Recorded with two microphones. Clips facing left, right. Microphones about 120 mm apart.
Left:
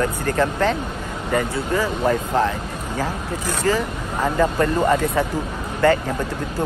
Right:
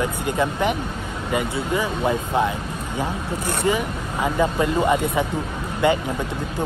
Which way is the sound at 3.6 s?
15° right (ahead or behind).